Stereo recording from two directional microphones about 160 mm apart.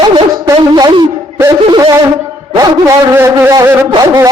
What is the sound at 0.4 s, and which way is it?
Speech, 20° right (ahead or behind).